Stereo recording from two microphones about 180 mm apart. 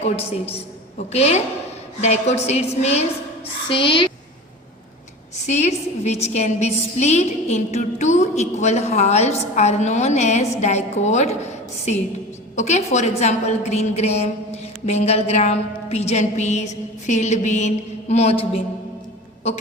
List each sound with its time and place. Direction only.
0.9 s a woman's voice: 35° left (ahead or behind)
5.5 s a woman's voice: 40° left (ahead or behind)
12.5 s a woman's voice: 40° left (ahead or behind)